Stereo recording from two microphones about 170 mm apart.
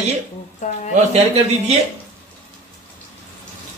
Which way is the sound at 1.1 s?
40° right (ahead or behind).